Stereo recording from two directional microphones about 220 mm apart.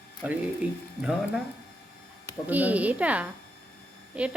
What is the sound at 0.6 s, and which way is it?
Speech, 5° right (ahead or behind).